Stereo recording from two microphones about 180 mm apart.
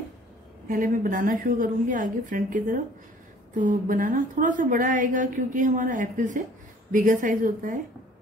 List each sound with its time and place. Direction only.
0.7 s a woman's voice: 50° right (ahead or behind)